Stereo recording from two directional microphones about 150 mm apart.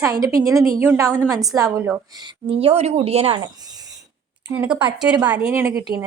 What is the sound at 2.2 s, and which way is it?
A woman's voice, 40° right (ahead or behind).